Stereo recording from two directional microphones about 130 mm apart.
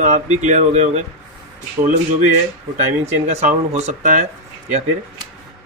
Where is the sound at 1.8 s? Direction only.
75° right (ahead or behind).